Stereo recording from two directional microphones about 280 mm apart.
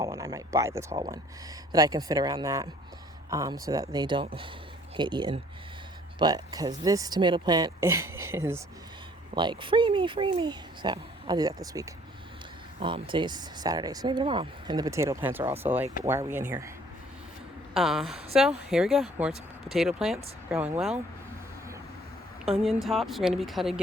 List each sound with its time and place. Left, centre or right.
0.0 s speech: centre
17.7 s speech: centre
22.6 s speech: centre